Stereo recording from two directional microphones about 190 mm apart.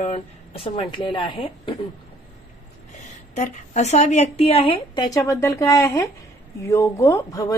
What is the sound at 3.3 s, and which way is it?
A woman's voice, 35° left (ahead or behind).